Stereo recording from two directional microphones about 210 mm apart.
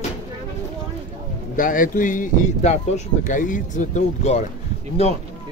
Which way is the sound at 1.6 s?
40° left (ahead or behind).